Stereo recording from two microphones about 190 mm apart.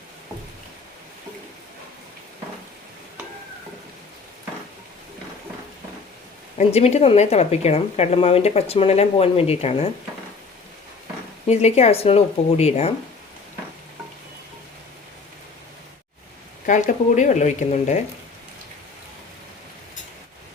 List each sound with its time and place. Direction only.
6.6 s a woman's voice: 35° left (ahead or behind)
11.4 s a woman's voice: 35° left (ahead or behind)
16.6 s a woman's voice: 40° left (ahead or behind)